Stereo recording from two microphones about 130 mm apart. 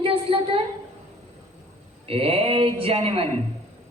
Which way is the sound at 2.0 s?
50° right (ahead or behind).